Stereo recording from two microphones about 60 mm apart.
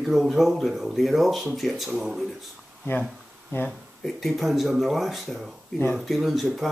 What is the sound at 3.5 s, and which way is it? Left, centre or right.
Speech, left.